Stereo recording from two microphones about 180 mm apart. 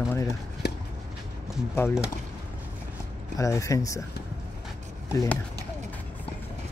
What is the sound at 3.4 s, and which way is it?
Speech, 15° left (ahead or behind).